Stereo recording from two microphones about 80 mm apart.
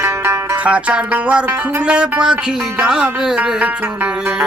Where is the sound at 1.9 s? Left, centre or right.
Centre.